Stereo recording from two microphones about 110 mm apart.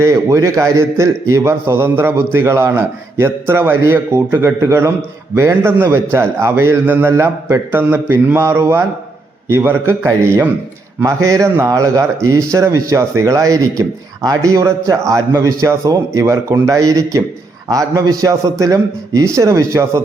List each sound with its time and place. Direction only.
0.0 s a man's voice: 25° right (ahead or behind)